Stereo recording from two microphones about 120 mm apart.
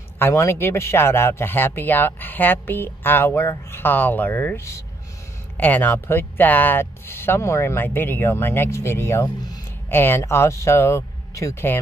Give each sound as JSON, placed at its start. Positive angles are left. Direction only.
{"t": 0.2, "sound": "speech", "side_deg": 20}